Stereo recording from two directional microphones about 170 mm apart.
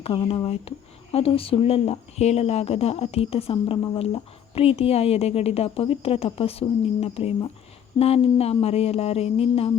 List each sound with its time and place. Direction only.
0.0 s speech: 30° left (ahead or behind)